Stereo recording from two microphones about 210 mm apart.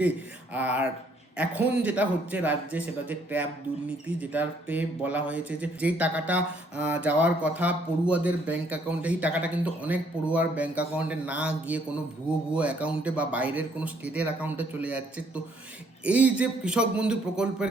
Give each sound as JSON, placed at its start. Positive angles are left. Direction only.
{"t": 0.5, "sound": "speech", "side_deg": -5}
{"t": 16.0, "sound": "a man's voice", "side_deg": -5}